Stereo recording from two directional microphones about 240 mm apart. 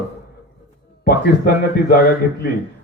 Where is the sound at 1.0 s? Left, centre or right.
Left.